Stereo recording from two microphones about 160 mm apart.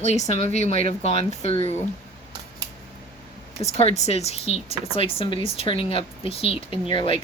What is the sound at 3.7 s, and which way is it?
Speech, 40° left (ahead or behind).